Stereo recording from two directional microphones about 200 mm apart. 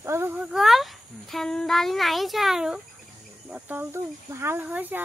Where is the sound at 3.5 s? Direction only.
10° right (ahead or behind).